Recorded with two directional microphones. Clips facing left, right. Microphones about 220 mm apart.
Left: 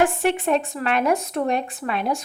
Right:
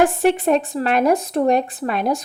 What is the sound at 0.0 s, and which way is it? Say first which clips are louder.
A woman's voice: right 4 dB; 35° right (ahead or behind).